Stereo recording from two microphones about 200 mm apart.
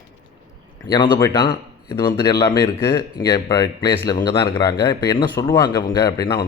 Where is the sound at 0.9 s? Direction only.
20° left (ahead or behind).